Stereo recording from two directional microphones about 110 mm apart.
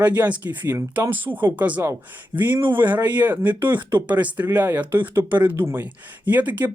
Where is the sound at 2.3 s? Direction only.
25° right (ahead or behind).